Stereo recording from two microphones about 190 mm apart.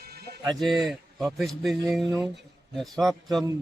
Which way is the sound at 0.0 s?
55° right (ahead or behind).